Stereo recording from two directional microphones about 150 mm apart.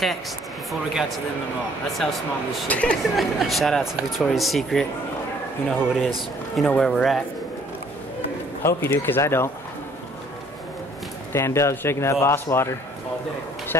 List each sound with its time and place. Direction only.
0.7 s speech: centre (ahead or behind)
2.7 s speech: 5° left (ahead or behind)
8.6 s a man's voice: 15° left (ahead or behind)
11.3 s a man's voice: 20° left (ahead or behind)